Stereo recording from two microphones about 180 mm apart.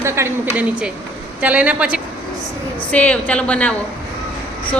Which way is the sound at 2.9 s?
5° left (ahead or behind).